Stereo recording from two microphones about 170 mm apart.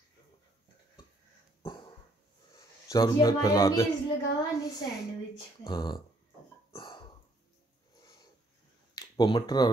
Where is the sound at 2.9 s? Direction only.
20° left (ahead or behind).